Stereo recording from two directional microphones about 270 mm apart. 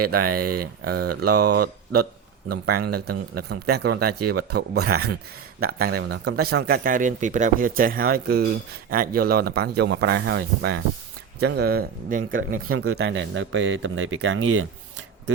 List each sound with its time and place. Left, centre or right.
0.0 s speech: right
0.3 s speech: right
12.6 s speech: right
13.0 s speech: right